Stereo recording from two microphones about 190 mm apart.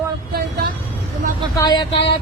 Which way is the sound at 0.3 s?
55° right (ahead or behind).